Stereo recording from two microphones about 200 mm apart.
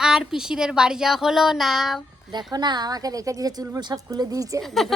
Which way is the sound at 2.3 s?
20° right (ahead or behind).